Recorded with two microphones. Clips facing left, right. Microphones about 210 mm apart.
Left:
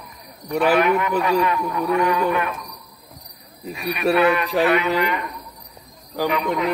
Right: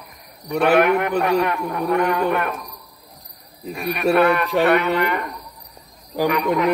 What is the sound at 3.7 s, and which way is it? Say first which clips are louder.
A man's voice: right 1 dB; 55° right (ahead or behind).